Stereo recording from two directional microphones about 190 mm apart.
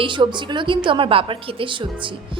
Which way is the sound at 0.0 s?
25° right (ahead or behind).